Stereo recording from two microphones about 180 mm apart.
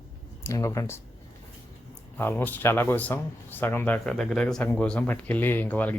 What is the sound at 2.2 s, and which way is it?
Speech, 10° left (ahead or behind).